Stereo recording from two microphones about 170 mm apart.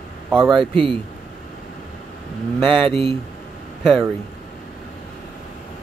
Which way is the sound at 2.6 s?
30° right (ahead or behind).